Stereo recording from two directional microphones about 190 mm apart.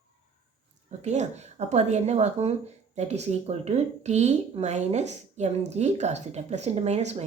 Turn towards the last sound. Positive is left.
turn(degrees=-35)  # may be behind; listen again after turning